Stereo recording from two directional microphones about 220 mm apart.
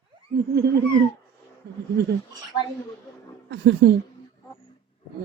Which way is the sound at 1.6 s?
45° right (ahead or behind).